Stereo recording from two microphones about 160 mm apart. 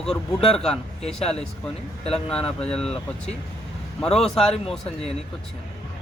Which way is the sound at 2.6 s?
5° left (ahead or behind).